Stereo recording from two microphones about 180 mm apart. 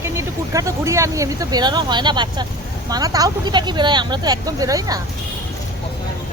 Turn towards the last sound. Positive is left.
turn(degrees=-20)  # may be behind; listen again after turning